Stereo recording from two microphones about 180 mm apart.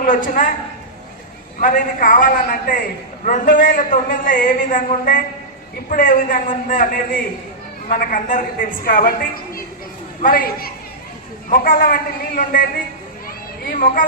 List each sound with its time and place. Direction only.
0.0 s a man's voice: 50° left (ahead or behind)
1.6 s a man's voice: 50° left (ahead or behind)
13.7 s a man's voice: 50° left (ahead or behind)